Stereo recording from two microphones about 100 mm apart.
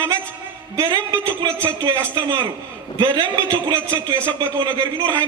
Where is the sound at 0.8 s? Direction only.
35° right (ahead or behind).